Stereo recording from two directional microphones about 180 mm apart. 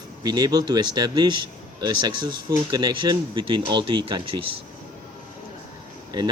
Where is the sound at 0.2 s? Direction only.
25° right (ahead or behind).